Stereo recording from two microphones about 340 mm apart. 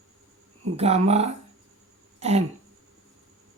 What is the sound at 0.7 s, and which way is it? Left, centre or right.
Speech, centre.